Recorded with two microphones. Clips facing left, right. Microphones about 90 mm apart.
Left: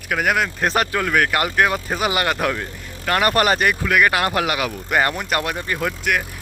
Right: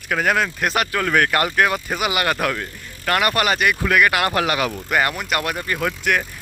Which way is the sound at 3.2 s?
35° left (ahead or behind).